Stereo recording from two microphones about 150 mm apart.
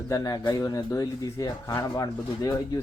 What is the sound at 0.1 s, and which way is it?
Speech, 25° left (ahead or behind).